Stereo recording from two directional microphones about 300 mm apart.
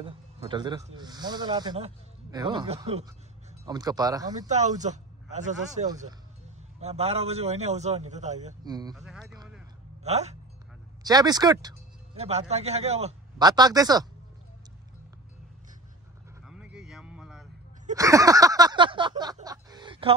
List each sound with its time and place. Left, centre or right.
0.0 s speech: centre
4.5 s a man's voice: right
8.9 s speech: centre
9.3 s a man's voice: centre
16.4 s a sound: centre